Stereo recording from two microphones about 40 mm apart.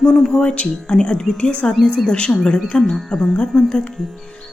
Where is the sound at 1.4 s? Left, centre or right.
Left.